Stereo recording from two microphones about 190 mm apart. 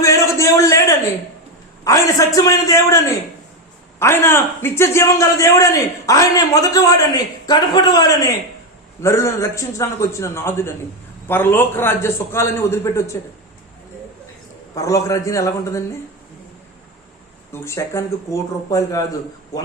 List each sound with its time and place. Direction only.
0.0 s a sound: 15° left (ahead or behind)
1.8 s a man's voice: 15° left (ahead or behind)
4.0 s a man's voice: 15° left (ahead or behind)
14.8 s a man's voice: 15° left (ahead or behind)
17.5 s a man's voice: 15° left (ahead or behind)